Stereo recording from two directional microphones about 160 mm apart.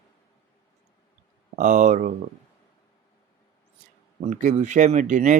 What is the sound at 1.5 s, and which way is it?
Speech, 50° right (ahead or behind).